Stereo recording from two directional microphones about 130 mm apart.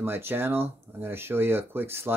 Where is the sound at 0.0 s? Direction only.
15° right (ahead or behind).